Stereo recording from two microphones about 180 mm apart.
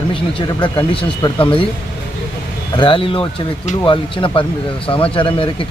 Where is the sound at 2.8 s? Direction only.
30° left (ahead or behind).